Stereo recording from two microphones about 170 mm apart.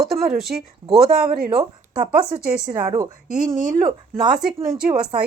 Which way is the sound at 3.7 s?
25° right (ahead or behind).